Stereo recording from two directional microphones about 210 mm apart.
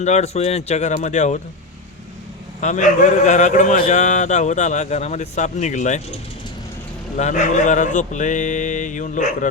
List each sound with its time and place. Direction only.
0.0 s speech: 30° left (ahead or behind)
2.6 s speech: 35° left (ahead or behind)
7.2 s speech: 35° left (ahead or behind)